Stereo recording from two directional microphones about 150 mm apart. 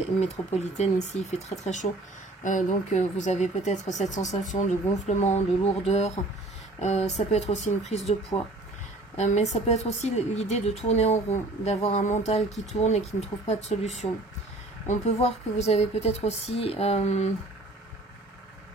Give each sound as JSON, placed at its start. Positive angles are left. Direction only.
{"t": 0.6, "sound": "a woman's voice", "side_deg": 50}